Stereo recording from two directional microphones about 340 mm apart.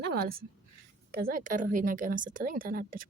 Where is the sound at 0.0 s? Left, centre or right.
Right.